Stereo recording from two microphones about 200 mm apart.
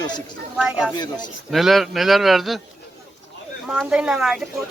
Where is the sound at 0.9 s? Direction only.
20° left (ahead or behind).